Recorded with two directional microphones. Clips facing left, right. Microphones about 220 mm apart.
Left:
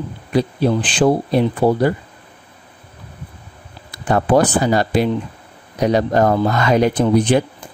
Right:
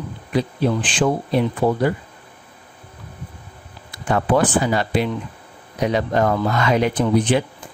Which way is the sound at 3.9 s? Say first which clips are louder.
Left 3 dB; 40° left (ahead or behind).